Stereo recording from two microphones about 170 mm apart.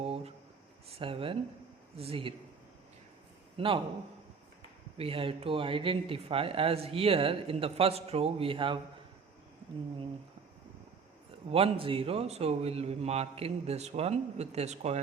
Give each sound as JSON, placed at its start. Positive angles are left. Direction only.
{"t": 0.0, "sound": "a sound", "side_deg": -35}
{"t": 0.9, "sound": "speech", "side_deg": -35}
{"t": 4.9, "sound": "speech", "side_deg": -35}
{"t": 11.4, "sound": "speech", "side_deg": -35}